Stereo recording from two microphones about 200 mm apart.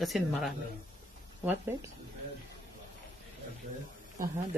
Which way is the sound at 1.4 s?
10° right (ahead or behind).